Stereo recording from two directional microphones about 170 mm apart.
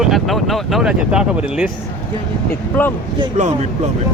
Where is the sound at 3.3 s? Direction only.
45° right (ahead or behind).